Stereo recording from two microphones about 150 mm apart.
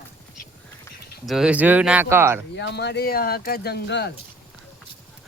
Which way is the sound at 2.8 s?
90° left.